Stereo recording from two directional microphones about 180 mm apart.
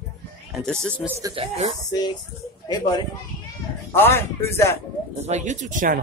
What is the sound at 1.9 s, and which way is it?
Speech, 20° left (ahead or behind).